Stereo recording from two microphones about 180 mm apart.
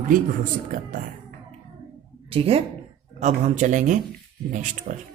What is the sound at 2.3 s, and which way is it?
Speech, 30° right (ahead or behind).